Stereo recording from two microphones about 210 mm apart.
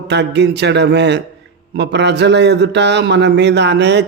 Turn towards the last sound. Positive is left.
turn(degrees=-55)  # may be behind; listen again after turning